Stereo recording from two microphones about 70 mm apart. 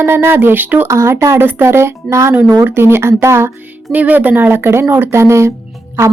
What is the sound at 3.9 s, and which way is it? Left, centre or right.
Speech, right.